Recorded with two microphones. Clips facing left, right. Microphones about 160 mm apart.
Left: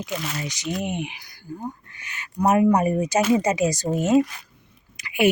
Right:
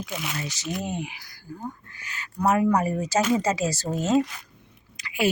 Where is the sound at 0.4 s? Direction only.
15° left (ahead or behind).